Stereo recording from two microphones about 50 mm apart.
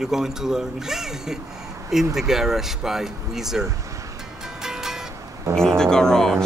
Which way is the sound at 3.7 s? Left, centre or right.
Right.